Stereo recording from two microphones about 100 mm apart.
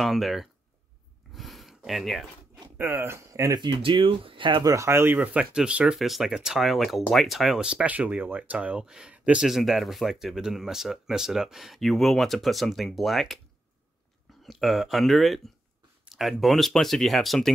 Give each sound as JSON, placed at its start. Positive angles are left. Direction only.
{"t": 0.0, "sound": "speech", "side_deg": 0}
{"t": 1.3, "sound": "a sound", "side_deg": 0}
{"t": 2.8, "sound": "speech", "side_deg": -25}
{"t": 3.6, "sound": "speech", "side_deg": -55}
{"t": 4.6, "sound": "speech", "side_deg": -30}
{"t": 14.4, "sound": "speech", "side_deg": 0}